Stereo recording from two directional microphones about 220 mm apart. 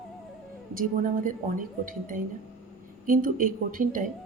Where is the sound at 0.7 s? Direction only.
40° right (ahead or behind).